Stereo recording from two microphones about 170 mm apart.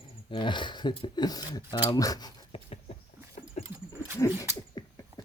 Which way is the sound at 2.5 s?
35° left (ahead or behind).